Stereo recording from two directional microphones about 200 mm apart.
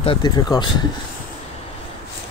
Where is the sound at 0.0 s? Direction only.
25° left (ahead or behind).